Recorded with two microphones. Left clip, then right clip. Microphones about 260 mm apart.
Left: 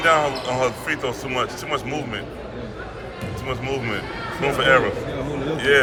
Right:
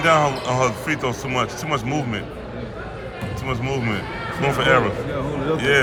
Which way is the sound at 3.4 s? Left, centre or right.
Centre.